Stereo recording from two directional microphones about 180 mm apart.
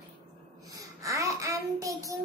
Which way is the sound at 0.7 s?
20° right (ahead or behind).